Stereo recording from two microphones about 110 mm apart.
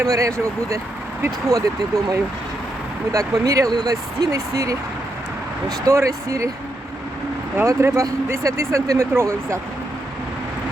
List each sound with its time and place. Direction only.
0.0 s speech: 30° right (ahead or behind)
3.1 s speech: 30° right (ahead or behind)
7.5 s speech: 25° right (ahead or behind)